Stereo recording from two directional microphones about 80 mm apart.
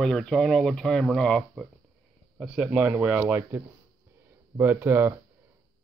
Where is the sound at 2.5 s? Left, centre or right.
Centre; by 5.1 s right.